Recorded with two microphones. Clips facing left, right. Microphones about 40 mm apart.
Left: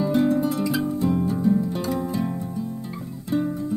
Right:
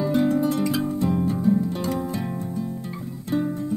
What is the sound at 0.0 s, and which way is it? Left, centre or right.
Music, centre.